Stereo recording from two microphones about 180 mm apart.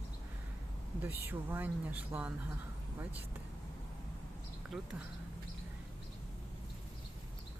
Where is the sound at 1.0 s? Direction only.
10° right (ahead or behind).